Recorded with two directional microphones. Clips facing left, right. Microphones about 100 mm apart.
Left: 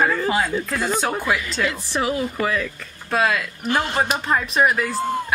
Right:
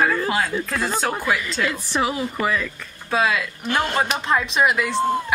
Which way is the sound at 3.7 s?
10° left (ahead or behind).